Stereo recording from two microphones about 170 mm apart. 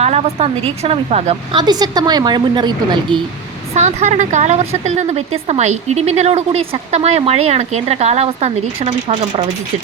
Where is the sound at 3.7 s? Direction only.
40° right (ahead or behind).